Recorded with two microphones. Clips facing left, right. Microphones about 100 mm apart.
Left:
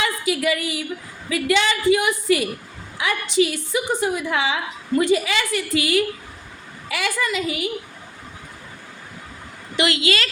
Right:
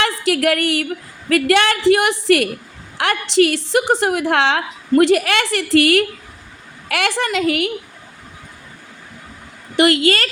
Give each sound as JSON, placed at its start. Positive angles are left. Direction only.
{"t": 0.0, "sound": "a woman's voice", "side_deg": -75}
{"t": 1.3, "sound": "a woman's voice", "side_deg": -65}
{"t": 9.7, "sound": "a woman's voice", "side_deg": -50}